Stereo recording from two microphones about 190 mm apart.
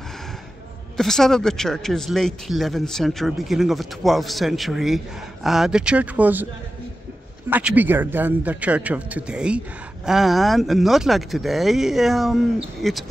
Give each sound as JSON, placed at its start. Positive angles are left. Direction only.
{"t": 0.9, "sound": "speech", "side_deg": 0}
{"t": 7.4, "sound": "a man's voice", "side_deg": -10}